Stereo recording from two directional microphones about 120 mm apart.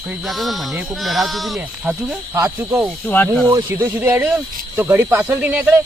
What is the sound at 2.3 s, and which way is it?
Speech, 25° right (ahead or behind).